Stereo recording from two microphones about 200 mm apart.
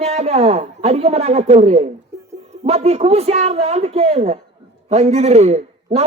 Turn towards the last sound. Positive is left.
turn(degrees=-35)  # may be behind; listen again after turning